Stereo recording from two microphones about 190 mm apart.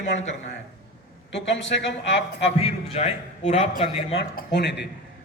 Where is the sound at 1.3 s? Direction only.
70° left (ahead or behind).